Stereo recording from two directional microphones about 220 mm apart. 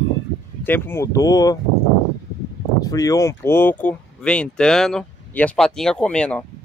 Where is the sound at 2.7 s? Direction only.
15° left (ahead or behind).